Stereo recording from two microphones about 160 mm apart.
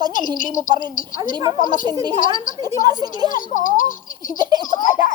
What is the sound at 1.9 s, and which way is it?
Speech, 25° right (ahead or behind).